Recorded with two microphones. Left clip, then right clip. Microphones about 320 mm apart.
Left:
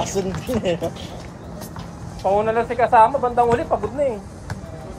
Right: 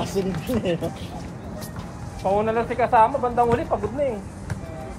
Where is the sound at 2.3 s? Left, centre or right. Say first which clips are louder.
Left 3 dB; left.